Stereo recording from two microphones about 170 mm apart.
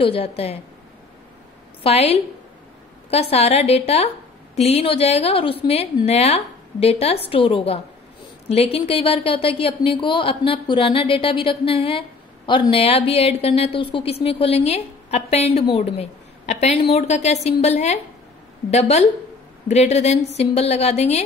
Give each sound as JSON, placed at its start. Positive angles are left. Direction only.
{"t": 0.0, "sound": "a woman's voice", "side_deg": 35}
{"t": 1.8, "sound": "a woman's voice", "side_deg": 35}